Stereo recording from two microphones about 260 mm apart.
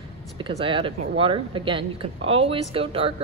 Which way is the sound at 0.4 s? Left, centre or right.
Right.